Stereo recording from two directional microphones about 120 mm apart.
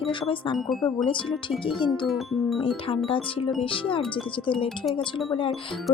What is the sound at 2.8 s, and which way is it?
Speech, 50° left (ahead or behind).